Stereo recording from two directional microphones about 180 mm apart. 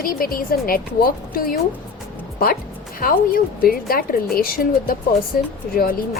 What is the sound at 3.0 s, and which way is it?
A woman's voice, 50° left (ahead or behind).